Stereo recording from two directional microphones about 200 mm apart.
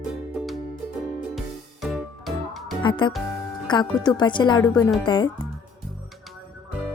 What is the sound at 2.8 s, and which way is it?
Music, 25° left (ahead or behind).